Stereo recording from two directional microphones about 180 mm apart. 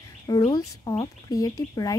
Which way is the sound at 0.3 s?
20° left (ahead or behind).